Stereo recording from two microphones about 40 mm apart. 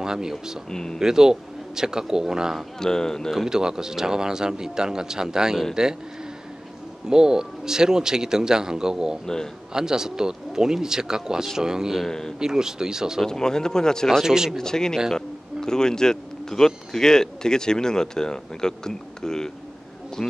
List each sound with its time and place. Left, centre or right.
0.0 s speech: centre
0.7 s speech: centre
0.9 s speech: centre
2.8 s speech: centre
3.3 s speech: centre
7.1 s speech: centre
9.2 s speech: centre
9.7 s speech: centre
12.1 s speech: centre
12.4 s speech: centre
13.2 s speech: centre
14.2 s speech: centre
14.6 s speech: centre